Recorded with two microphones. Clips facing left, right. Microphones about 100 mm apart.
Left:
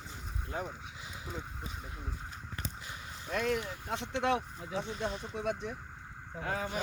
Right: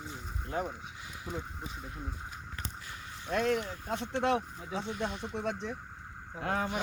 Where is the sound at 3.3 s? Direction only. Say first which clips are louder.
Right 3 dB; 50° right (ahead or behind).